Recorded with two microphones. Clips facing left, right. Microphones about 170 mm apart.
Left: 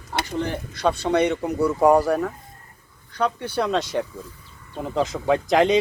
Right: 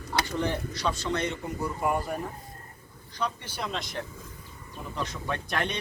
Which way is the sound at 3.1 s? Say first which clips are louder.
Left 9 dB; 65° left (ahead or behind).